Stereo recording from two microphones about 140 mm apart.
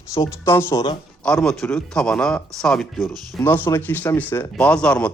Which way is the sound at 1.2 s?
5° left (ahead or behind).